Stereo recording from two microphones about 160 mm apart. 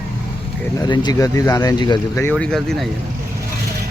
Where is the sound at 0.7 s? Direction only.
25° left (ahead or behind).